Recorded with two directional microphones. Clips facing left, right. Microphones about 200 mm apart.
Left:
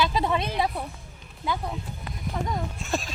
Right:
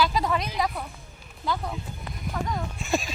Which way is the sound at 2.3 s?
20° left (ahead or behind).